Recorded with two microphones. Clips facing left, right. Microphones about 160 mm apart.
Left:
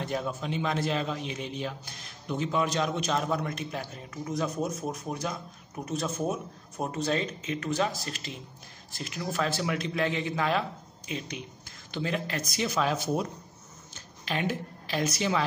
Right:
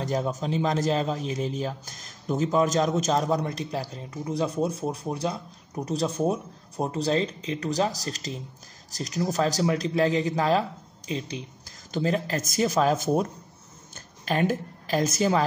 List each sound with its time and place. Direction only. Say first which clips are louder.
0.0 s a man's voice: right 4 dB; 35° right (ahead or behind)